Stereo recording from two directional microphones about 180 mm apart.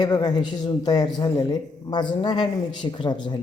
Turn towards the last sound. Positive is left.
turn(degrees=25)  # may be behind; listen again after turning